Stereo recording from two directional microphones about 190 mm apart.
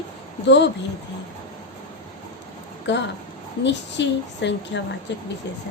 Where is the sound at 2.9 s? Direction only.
70° left (ahead or behind).